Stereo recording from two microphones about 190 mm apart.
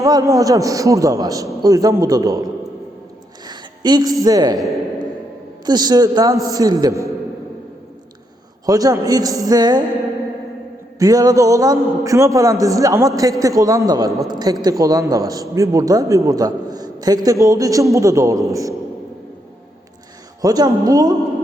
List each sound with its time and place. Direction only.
0.0 s a man's voice: 15° right (ahead or behind)
3.4 s a sound: 20° right (ahead or behind)
4.2 s a woman's voice: 20° right (ahead or behind)
4.5 s a man's voice: centre (ahead or behind)
5.6 s a woman's voice: 20° right (ahead or behind)
8.6 s a woman's voice: 20° right (ahead or behind)
11.0 s a man's voice: 20° right (ahead or behind)
20.4 s a woman's voice: 20° right (ahead or behind)